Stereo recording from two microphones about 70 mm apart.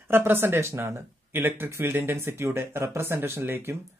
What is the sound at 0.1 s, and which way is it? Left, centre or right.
Speech, right.